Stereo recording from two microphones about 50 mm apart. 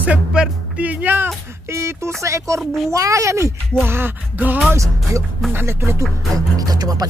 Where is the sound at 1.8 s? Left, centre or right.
Right.